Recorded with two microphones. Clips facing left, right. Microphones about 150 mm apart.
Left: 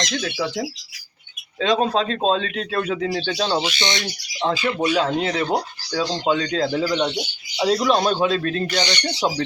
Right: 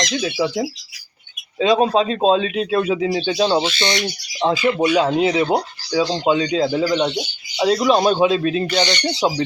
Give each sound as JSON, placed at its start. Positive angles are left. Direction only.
{"t": 0.0, "sound": "speech", "side_deg": -10}
{"t": 3.6, "sound": "speech", "side_deg": 15}
{"t": 3.9, "sound": "speech", "side_deg": -15}